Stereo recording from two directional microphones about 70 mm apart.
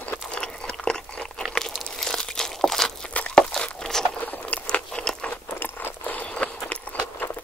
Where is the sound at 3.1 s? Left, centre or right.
Centre.